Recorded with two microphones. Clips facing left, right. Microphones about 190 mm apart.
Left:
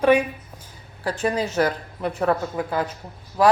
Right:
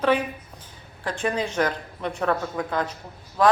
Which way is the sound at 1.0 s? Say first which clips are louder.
Left 3 dB; 10° left (ahead or behind).